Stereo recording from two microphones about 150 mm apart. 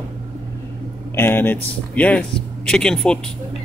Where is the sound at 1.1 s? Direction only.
15° left (ahead or behind).